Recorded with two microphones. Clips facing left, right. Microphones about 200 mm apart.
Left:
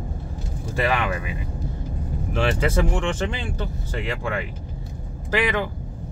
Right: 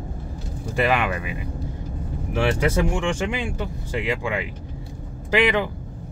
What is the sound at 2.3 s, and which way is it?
Speech, 15° right (ahead or behind).